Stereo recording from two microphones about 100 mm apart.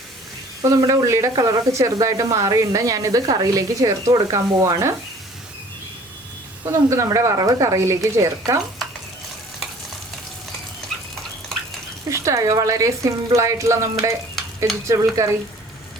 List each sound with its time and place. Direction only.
0.6 s speech: 35° right (ahead or behind)
6.7 s speech: 30° right (ahead or behind)
12.0 s speech: 30° right (ahead or behind)